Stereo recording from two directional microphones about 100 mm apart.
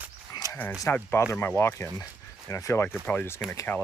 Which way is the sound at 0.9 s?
25° left (ahead or behind).